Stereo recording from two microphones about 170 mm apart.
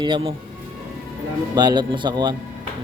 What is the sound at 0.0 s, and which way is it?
Speech, 30° right (ahead or behind).